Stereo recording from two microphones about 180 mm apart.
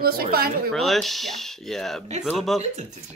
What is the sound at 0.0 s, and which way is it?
Speech, 60° right (ahead or behind).